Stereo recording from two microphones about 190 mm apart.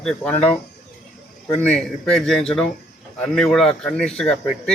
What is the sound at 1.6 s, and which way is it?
A man's voice, 5° left (ahead or behind).